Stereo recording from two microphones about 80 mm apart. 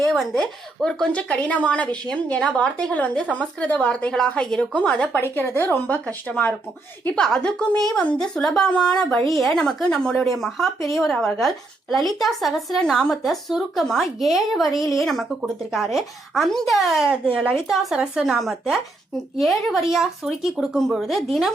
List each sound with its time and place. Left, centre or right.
0.0 s a woman's voice: centre
5.2 s speech: left
7.2 s a woman's voice: centre
17.2 s speech: centre
17.7 s a woman's voice: centre